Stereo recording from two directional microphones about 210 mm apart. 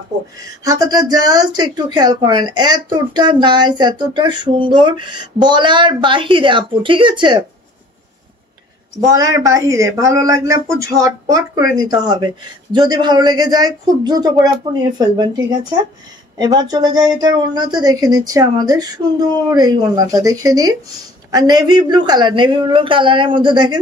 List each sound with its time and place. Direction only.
0.7 s speech: 15° right (ahead or behind)
9.1 s speech: 15° right (ahead or behind)